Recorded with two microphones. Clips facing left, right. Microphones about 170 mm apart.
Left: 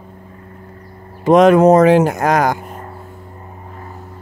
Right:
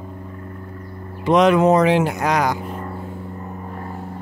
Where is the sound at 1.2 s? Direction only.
45° left (ahead or behind).